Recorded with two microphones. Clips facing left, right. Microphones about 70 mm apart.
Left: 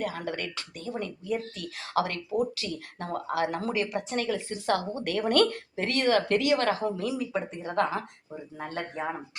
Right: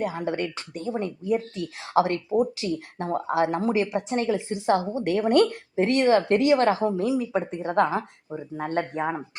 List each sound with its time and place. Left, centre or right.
0.0 s speech: right